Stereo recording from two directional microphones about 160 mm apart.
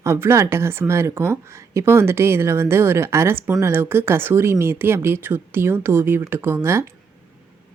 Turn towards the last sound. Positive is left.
turn(degrees=-15)  # may be behind; listen again after turning